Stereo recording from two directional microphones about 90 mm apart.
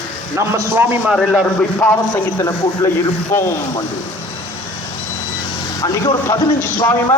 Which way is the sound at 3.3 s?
30° left (ahead or behind).